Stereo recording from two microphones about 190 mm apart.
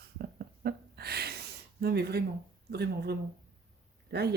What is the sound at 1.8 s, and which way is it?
Speech, 60° right (ahead or behind).